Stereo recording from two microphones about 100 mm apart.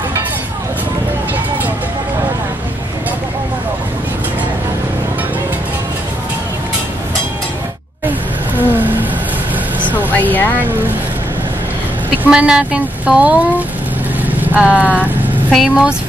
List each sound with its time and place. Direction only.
8.5 s a sound: 20° right (ahead or behind)
9.8 s vehicle: 15° left (ahead or behind)
12.2 s speech: 10° right (ahead or behind)